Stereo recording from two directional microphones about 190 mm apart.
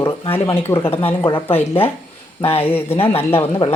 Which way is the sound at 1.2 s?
25° left (ahead or behind).